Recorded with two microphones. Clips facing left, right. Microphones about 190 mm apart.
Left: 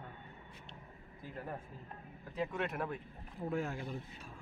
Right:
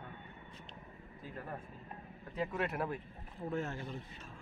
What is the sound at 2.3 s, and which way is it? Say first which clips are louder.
Speech: right 1 dB; centre (ahead or behind).